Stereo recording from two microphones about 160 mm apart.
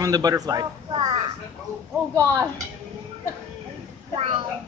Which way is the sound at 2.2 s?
20° right (ahead or behind).